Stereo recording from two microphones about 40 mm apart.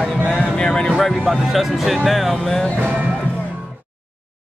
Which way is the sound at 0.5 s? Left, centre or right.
Left.